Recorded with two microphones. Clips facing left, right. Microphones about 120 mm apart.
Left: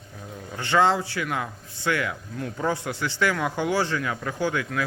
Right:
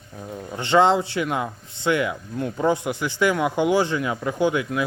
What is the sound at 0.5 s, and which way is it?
Speech, 20° right (ahead or behind).